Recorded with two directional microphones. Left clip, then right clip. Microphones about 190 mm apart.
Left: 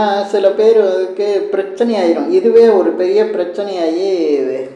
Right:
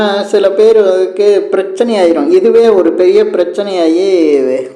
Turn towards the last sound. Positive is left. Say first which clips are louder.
# right 6 dB
turn(degrees=-40)  # may be behind; listen again after turning